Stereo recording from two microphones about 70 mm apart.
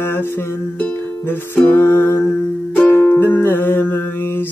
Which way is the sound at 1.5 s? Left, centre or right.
Left.